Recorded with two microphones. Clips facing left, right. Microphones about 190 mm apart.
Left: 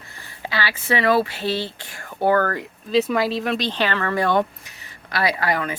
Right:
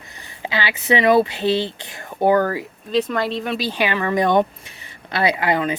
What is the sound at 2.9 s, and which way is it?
Speech, 5° left (ahead or behind).